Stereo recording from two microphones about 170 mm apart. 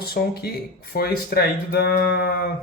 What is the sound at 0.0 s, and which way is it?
Speech, 65° left (ahead or behind).